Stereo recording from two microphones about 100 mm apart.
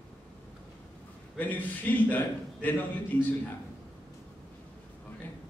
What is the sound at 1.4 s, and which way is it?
A man's voice, 15° left (ahead or behind).